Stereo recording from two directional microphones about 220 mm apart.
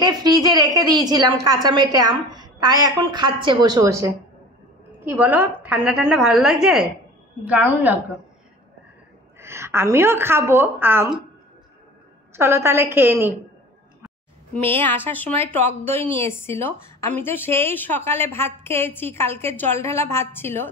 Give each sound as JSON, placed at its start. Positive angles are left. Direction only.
{"t": 0.0, "sound": "a woman's voice", "side_deg": -20}
{"t": 5.1, "sound": "a woman's voice", "side_deg": -5}
{"t": 9.4, "sound": "a woman's voice", "side_deg": -10}
{"t": 12.4, "sound": "a woman's voice", "side_deg": -10}
{"t": 14.6, "sound": "a woman's voice", "side_deg": 10}